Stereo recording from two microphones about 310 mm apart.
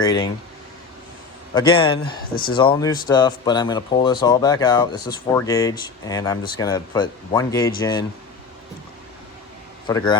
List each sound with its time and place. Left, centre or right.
0.0 s speech: centre
1.5 s speech: centre
2.0 s speech: left
2.6 s speech: centre
9.8 s a man's voice: centre